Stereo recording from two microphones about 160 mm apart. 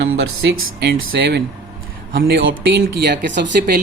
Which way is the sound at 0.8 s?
80° right.